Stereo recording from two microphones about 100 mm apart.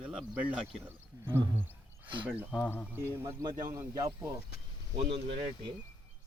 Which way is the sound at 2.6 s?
20° left (ahead or behind).